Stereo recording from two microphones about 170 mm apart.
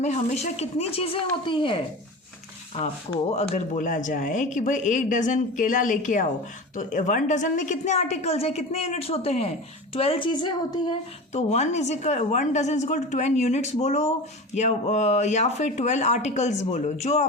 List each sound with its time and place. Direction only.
0.0 s speech: 40° left (ahead or behind)
3.1 s a woman's voice: 40° left (ahead or behind)
11.3 s speech: 40° left (ahead or behind)